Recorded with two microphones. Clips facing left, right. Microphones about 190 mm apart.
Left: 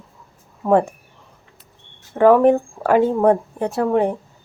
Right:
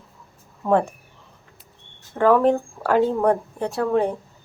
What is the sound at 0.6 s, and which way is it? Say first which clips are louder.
Speech: left 3 dB; 15° left (ahead or behind).